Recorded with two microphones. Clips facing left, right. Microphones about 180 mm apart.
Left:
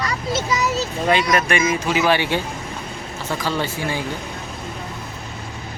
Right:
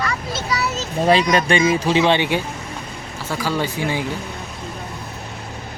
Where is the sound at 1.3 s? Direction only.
30° right (ahead or behind).